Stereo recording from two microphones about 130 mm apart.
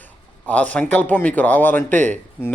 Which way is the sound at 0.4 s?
10° left (ahead or behind).